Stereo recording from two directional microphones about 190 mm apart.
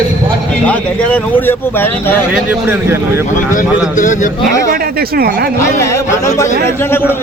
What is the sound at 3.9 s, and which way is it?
Speech, 40° left (ahead or behind).